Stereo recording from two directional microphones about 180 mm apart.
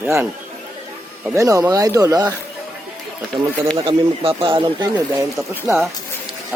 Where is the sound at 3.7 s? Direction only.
30° right (ahead or behind).